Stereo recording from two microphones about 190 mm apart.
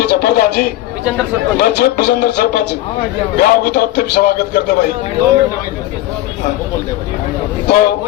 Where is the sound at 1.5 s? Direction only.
55° left (ahead or behind).